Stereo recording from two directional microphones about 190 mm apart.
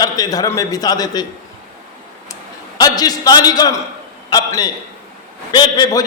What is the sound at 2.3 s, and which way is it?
A man's voice, 20° left (ahead or behind).